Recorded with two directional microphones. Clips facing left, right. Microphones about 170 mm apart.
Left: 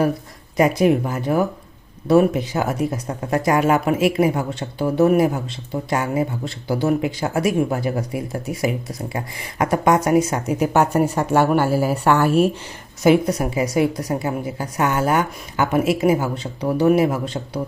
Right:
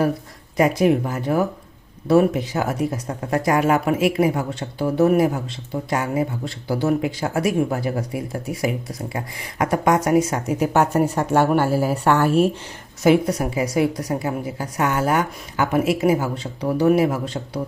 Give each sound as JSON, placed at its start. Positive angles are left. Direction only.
{"t": 0.5, "sound": "speech", "side_deg": 15}